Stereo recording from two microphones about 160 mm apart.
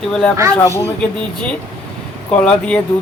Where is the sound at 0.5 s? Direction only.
15° left (ahead or behind).